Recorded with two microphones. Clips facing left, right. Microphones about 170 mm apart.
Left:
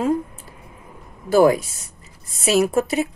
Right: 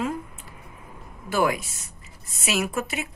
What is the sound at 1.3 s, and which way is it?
Speech, 35° left (ahead or behind).